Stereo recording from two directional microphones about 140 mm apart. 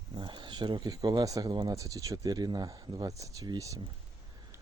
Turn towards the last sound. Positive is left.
turn(degrees=-25)  # may be behind; listen again after turning